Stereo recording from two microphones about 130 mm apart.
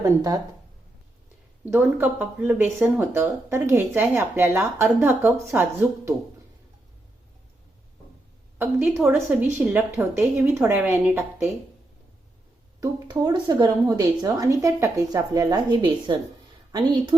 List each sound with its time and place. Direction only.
0.0 s a woman's voice: 30° right (ahead or behind)
1.7 s a woman's voice: 15° right (ahead or behind)
8.5 s a woman's voice: 15° right (ahead or behind)
12.8 s a woman's voice: 30° right (ahead or behind)